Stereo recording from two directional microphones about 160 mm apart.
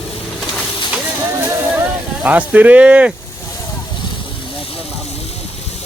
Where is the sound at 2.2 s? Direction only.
10° right (ahead or behind).